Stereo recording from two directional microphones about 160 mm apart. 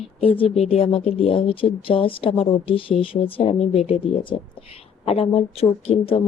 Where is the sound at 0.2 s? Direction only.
35° left (ahead or behind).